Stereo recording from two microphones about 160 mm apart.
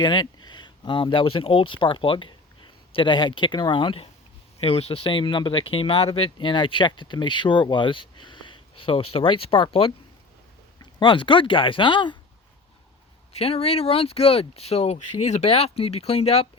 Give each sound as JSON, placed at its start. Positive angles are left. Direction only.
{"t": 0.0, "sound": "speech", "side_deg": 30}
{"t": 13.3, "sound": "speech", "side_deg": 40}